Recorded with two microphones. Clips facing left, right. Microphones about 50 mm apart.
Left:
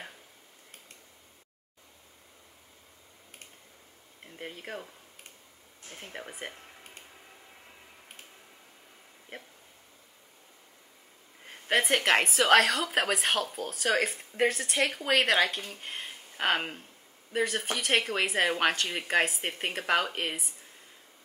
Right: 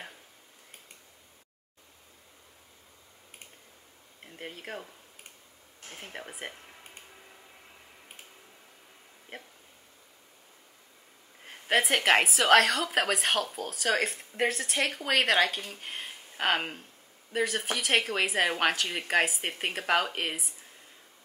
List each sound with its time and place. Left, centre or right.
4.2 s speech: centre
5.9 s a woman's voice: centre
11.4 s a woman's voice: centre